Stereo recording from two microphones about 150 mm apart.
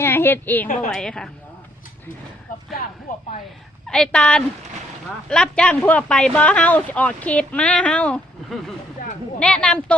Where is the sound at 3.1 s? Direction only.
65° left (ahead or behind).